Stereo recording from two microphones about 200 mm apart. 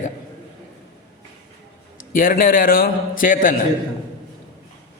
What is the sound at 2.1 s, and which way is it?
A man's voice, 45° left (ahead or behind).